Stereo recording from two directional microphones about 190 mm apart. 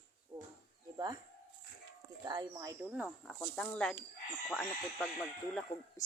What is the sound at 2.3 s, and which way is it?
Speech, 20° right (ahead or behind).